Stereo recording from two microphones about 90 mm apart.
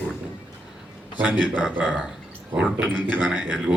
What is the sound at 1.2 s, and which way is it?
Speech, 15° right (ahead or behind).